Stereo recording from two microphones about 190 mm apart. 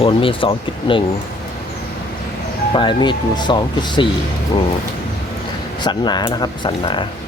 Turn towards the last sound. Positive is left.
turn(degrees=25)  # may be behind; listen again after turning